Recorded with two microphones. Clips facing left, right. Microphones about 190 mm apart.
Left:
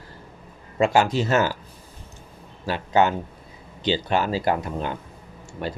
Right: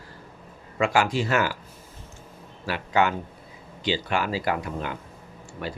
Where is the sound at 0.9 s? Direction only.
25° left (ahead or behind).